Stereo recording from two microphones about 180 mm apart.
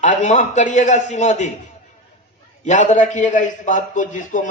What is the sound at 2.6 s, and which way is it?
A man's voice, 40° left (ahead or behind).